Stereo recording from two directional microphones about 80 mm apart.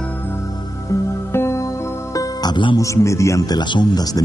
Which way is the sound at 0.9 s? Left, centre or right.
Left.